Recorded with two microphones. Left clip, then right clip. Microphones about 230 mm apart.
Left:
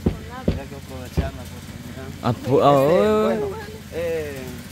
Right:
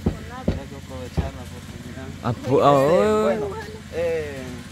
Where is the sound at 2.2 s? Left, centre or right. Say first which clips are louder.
Left 1 dB; centre.